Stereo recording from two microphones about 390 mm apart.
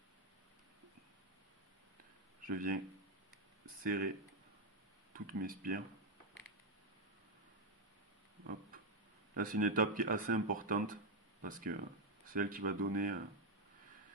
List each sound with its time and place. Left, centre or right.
2.4 s speech: right
5.1 s speech: right
9.3 s speech: right